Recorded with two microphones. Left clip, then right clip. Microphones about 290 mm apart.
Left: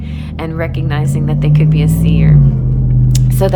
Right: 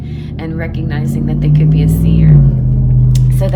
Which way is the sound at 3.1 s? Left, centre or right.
Centre.